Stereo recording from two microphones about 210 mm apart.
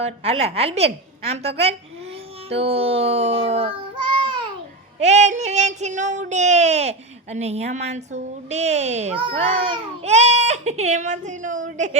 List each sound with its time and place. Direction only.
0.0 s speech: 30° right (ahead or behind)
4.9 s child singing: 30° right (ahead or behind)